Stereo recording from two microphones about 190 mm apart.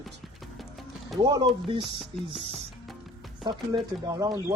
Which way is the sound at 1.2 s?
20° right (ahead or behind).